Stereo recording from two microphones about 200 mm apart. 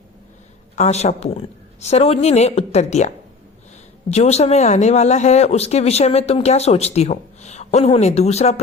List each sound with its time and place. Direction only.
0.8 s speech: 35° left (ahead or behind)
4.1 s speech: 30° left (ahead or behind)